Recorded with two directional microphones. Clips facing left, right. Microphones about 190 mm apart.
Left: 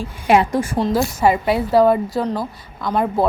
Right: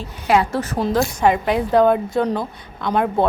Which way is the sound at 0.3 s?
20° left (ahead or behind).